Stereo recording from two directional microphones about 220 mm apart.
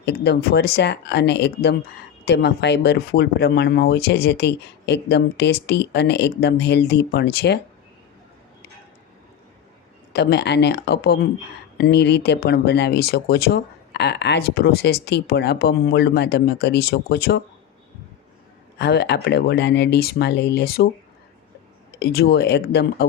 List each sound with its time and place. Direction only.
0.0 s speech: 50° left (ahead or behind)
10.1 s speech: 50° left (ahead or behind)
18.8 s speech: 50° left (ahead or behind)
21.9 s speech: 45° left (ahead or behind)